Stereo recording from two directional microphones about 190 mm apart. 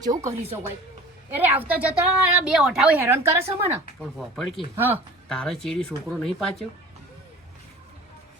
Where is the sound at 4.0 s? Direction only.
Centre (ahead or behind).